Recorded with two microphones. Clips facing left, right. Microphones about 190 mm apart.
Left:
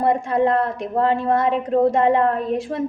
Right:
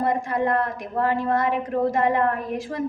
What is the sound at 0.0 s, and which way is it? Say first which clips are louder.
A woman's voice: left 5 dB; 25° left (ahead or behind).